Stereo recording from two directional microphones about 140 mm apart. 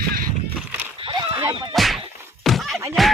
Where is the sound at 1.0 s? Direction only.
35° right (ahead or behind).